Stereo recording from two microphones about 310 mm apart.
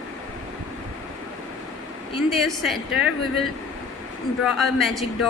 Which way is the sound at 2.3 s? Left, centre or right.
Centre.